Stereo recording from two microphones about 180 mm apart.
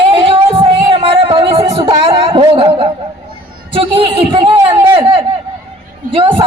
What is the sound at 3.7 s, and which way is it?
A man's voice, 30° right (ahead or behind).